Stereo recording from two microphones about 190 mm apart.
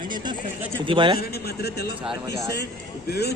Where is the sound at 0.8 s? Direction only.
25° right (ahead or behind).